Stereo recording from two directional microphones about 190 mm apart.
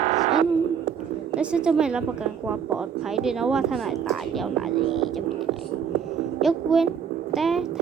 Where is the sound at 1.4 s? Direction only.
5° right (ahead or behind).